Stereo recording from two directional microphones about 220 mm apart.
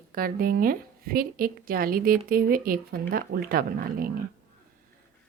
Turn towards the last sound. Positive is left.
turn(degrees=-40)  # may be behind; listen again after turning